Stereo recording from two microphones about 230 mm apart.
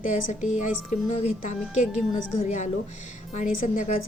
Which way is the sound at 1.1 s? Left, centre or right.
Left.